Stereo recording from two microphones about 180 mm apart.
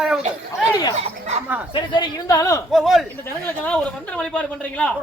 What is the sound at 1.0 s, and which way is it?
Speech, 40° right (ahead or behind).